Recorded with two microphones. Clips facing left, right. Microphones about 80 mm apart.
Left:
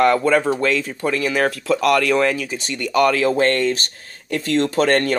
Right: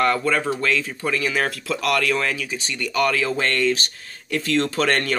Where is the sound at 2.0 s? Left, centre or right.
Centre.